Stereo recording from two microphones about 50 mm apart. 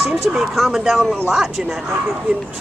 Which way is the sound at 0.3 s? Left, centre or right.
Right.